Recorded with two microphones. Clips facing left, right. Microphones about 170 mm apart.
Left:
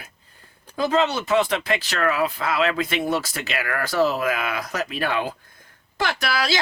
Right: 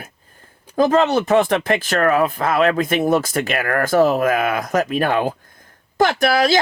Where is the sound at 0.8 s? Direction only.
50° right (ahead or behind).